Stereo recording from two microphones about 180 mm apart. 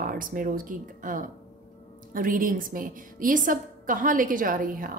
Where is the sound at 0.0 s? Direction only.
50° right (ahead or behind).